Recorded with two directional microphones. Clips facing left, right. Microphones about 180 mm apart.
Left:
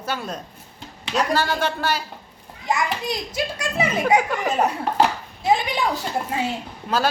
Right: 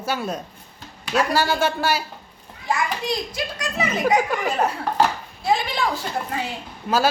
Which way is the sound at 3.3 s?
25° left (ahead or behind).